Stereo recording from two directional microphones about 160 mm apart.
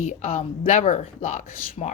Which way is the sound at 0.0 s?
45° left (ahead or behind).